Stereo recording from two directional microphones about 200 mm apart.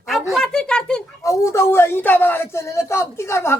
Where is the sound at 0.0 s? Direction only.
Centre (ahead or behind).